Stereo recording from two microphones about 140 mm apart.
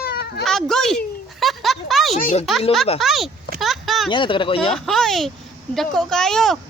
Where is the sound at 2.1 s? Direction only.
55° left (ahead or behind).